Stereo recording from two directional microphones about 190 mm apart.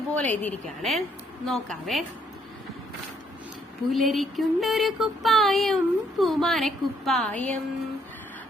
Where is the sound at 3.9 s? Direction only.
Centre (ahead or behind).